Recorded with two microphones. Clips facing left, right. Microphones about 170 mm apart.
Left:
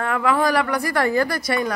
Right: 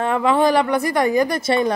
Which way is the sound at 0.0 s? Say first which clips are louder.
Right 3 dB; 25° right (ahead or behind).